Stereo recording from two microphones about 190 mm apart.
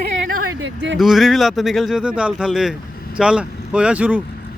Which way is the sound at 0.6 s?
70° right (ahead or behind).